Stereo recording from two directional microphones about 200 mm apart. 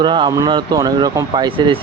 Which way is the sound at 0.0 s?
25° right (ahead or behind).